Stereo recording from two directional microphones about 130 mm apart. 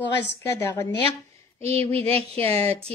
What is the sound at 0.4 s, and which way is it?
Speech, 20° left (ahead or behind).